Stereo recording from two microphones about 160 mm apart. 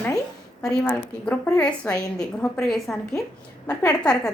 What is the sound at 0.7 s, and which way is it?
A woman's voice, 5° left (ahead or behind).